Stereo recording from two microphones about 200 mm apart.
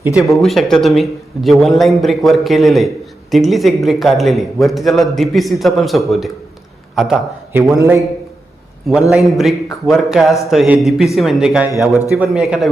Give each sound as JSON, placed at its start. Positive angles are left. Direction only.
{"t": 0.0, "sound": "a man's voice", "side_deg": -5}
{"t": 7.8, "sound": "a man's voice", "side_deg": -15}
{"t": 8.9, "sound": "a man's voice", "side_deg": 0}